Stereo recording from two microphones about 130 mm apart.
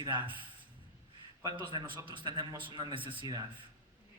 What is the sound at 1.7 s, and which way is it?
Speech, 35° right (ahead or behind).